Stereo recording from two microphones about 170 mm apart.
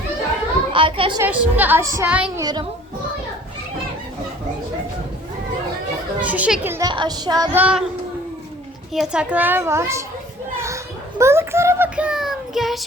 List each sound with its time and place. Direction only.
0.7 s a child's voice: 30° right (ahead or behind)
1.2 s child singing: 10° right (ahead or behind)
2.4 s a woman's voice: 25° right (ahead or behind)
6.2 s child singing: 10° right (ahead or behind)
6.8 s a woman's voice: 25° right (ahead or behind)
7.5 s child singing: 5° right (ahead or behind)
8.9 s child singing: 5° right (ahead or behind)
11.2 s child singing: 15° right (ahead or behind)